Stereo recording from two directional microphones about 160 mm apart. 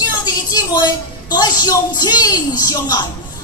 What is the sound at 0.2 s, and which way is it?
A woman's voice, 25° left (ahead or behind).